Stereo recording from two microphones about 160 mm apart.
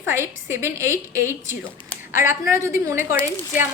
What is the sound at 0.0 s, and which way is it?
A woman's voice, 15° right (ahead or behind).